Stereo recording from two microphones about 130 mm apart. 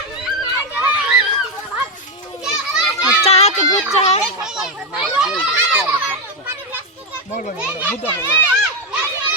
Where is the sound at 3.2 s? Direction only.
55° left (ahead or behind).